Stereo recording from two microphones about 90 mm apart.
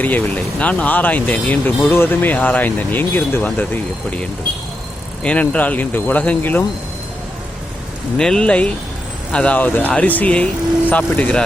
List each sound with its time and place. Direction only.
0.6 s speech: 15° left (ahead or behind)
8.2 s speech: 10° left (ahead or behind)